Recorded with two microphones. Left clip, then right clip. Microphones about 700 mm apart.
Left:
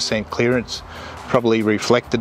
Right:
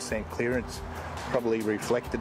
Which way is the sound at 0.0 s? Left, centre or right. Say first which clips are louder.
Left 11 dB; left.